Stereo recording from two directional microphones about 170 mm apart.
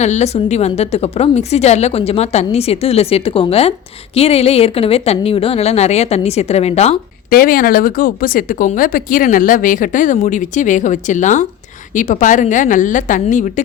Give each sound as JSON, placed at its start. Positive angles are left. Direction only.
{"t": 0.0, "sound": "a woman's voice", "side_deg": 40}
{"t": 7.3, "sound": "speech", "side_deg": 55}